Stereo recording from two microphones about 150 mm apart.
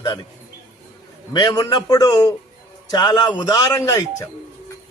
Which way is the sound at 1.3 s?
25° left (ahead or behind).